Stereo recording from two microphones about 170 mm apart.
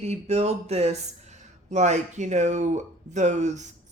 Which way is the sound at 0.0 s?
40° right (ahead or behind).